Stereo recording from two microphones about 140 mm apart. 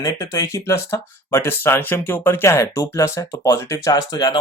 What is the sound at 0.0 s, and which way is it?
Speech, 25° left (ahead or behind).